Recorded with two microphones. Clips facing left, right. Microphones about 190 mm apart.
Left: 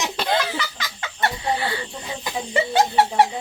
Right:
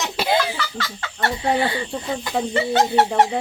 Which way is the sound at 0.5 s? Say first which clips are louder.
Right 1 dB; 20° left (ahead or behind).